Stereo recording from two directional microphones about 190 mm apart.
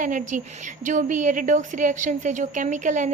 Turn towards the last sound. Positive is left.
turn(degrees=-40)  # may be behind; listen again after turning